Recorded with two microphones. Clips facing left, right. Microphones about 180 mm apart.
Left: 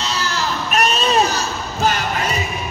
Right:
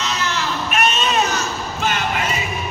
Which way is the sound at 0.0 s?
35° left (ahead or behind).